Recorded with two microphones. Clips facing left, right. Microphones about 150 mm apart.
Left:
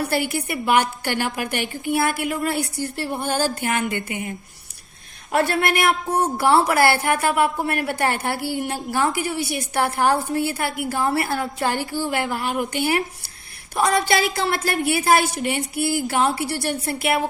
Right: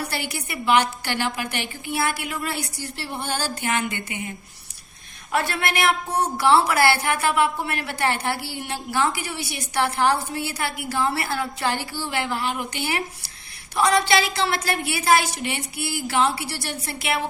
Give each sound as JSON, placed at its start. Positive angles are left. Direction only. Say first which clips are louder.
{"t": 0.1, "sound": "speech", "louder": "left 7 dB", "side_deg": 50}
{"t": 5.3, "sound": "speech", "louder": "left 4 dB", "side_deg": 45}